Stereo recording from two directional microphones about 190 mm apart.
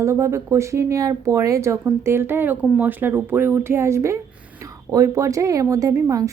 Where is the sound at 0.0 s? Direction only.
15° right (ahead or behind).